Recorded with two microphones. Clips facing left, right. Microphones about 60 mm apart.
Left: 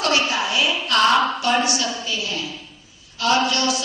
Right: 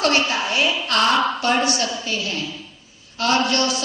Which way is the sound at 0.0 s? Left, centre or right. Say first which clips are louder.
Right 1 dB; right.